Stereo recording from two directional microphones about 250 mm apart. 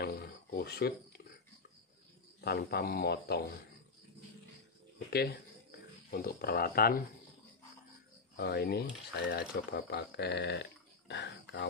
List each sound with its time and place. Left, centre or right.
0.0 s cricket: left
2.4 s a man's voice: left
4.9 s a sound: left
8.4 s speech: left